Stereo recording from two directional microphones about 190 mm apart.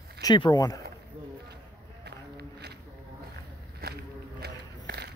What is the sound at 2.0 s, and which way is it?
Run, 60° right (ahead or behind).